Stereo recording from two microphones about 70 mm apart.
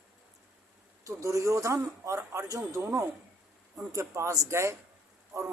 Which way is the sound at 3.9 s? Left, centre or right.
Right.